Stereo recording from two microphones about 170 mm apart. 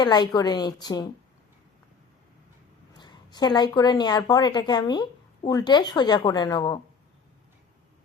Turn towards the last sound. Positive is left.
turn(degrees=25)  # may be behind; listen again after turning